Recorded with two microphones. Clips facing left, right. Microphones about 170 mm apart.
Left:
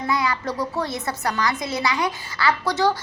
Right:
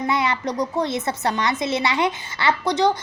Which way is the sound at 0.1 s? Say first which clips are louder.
Left 1 dB; 25° right (ahead or behind).